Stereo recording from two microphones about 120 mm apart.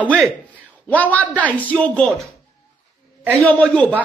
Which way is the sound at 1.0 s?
15° left (ahead or behind).